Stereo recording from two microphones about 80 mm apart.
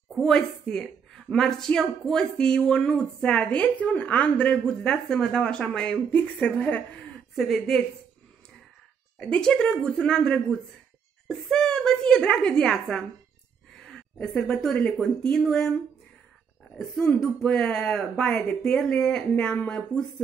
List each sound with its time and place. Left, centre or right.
0.2 s a woman's voice: centre
7.3 s speech: centre
9.2 s a woman's voice: centre
13.7 s a sound: centre
15.0 s speech: centre
17.2 s a woman's voice: centre